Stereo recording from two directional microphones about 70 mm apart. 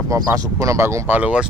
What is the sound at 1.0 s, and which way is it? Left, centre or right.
Speech, right.